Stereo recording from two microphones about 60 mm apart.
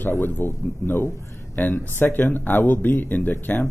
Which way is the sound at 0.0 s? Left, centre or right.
Left.